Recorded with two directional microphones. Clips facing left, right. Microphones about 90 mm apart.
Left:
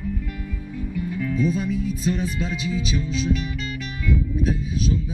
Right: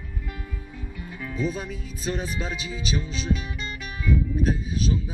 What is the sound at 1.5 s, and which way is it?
Speech, 40° right (ahead or behind).